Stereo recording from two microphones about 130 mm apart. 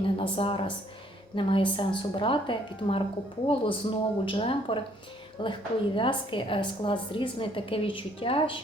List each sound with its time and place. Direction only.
0.2 s a woman's voice: 45° left (ahead or behind)